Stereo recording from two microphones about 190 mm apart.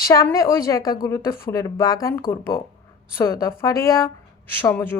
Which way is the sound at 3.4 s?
15° left (ahead or behind).